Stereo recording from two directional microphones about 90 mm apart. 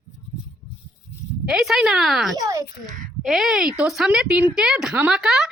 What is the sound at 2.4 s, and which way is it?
Speech, 35° right (ahead or behind).